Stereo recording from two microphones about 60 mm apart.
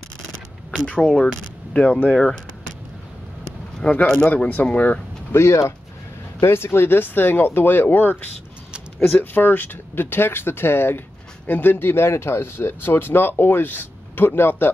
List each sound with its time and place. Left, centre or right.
0.8 s speech: centre
3.8 s speech: left
5.3 s speech: left